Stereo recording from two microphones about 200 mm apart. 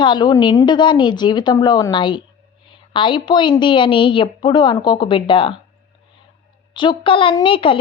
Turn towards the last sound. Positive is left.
turn(degrees=25)  # may be behind; listen again after turning